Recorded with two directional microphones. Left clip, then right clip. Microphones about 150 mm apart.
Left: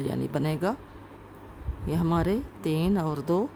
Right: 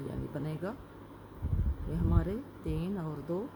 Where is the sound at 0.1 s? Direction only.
90° left.